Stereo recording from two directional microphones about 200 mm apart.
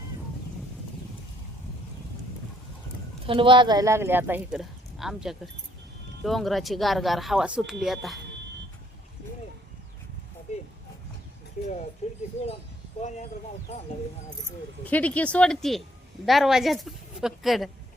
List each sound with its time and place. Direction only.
3.2 s speech: 25° right (ahead or behind); by 8.2 s centre (ahead or behind)
11.6 s speech: 35° left (ahead or behind)
13.0 s speech: 35° left (ahead or behind)
14.8 s speech: 5° left (ahead or behind)